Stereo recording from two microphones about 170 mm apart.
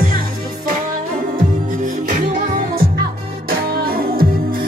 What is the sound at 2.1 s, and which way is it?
Music, 55° right (ahead or behind).